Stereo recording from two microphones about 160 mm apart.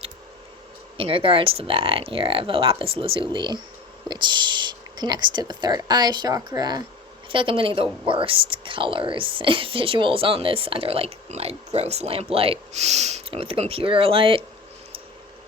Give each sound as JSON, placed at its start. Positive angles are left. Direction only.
{"t": 0.9, "sound": "speech", "side_deg": -35}